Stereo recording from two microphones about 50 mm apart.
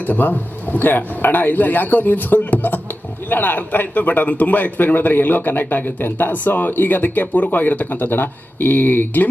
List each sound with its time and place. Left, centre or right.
0.0 s a man's voice: left